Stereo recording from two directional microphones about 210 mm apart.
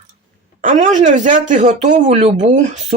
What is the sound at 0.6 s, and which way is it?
Speech, 40° right (ahead or behind).